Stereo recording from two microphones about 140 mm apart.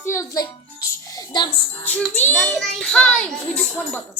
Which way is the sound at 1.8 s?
10° left (ahead or behind).